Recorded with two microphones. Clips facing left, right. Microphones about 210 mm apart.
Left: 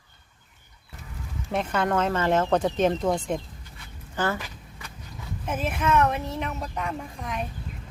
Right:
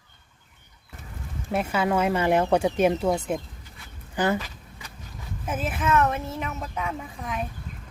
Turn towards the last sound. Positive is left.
turn(degrees=0)  # may be behind; listen again after turning